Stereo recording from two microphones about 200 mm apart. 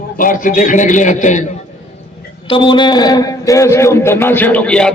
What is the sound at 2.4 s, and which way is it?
A man's voice, 25° left (ahead or behind).